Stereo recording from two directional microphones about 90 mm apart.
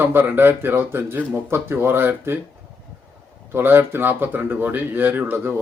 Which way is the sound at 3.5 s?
25° right (ahead or behind).